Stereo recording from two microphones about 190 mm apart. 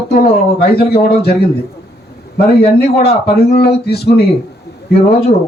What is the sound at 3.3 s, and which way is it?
Speech, 55° left (ahead or behind).